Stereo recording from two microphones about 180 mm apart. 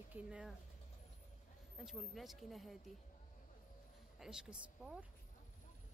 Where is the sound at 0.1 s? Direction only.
5° right (ahead or behind).